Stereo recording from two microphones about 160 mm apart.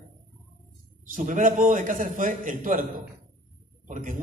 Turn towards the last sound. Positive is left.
turn(degrees=-55)  # may be behind; listen again after turning